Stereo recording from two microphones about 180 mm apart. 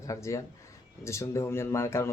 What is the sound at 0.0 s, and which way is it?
Speech, 15° left (ahead or behind).